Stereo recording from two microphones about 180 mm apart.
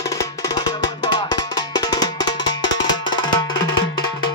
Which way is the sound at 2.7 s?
90° left.